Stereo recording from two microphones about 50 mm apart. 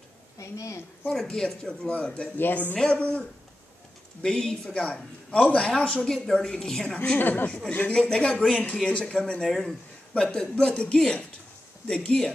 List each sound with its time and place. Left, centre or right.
0.4 s a woman's voice: left
1.0 s speech: centre
2.3 s speech: left
2.7 s a woman's voice: left
4.2 s speech: centre
5.3 s a woman's voice: left
7.2 s speech: left
7.9 s a woman's voice: centre